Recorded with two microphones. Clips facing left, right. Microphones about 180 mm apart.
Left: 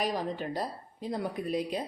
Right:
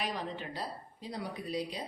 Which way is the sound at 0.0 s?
45° left (ahead or behind).